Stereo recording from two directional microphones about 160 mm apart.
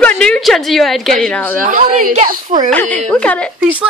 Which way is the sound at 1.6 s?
55° right (ahead or behind).